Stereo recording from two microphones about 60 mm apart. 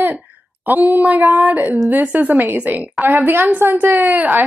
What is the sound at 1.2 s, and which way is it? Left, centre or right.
A woman's voice, right.